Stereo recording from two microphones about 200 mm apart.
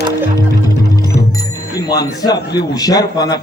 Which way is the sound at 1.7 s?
20° left (ahead or behind).